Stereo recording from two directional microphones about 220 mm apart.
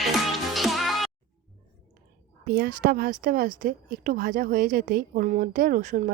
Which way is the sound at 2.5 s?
45° right (ahead or behind).